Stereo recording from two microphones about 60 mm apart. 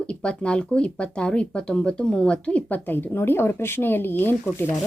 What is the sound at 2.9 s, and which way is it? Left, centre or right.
Speech, left.